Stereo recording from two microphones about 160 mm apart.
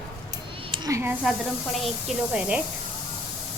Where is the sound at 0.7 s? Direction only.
25° right (ahead or behind).